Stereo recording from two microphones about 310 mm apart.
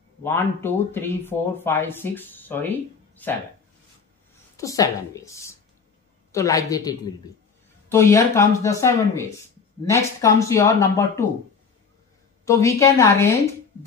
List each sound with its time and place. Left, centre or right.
0.2 s speech: centre
4.6 s speech: centre
12.4 s speech: centre